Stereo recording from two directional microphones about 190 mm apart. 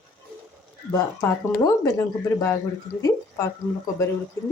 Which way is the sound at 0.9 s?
15° left (ahead or behind).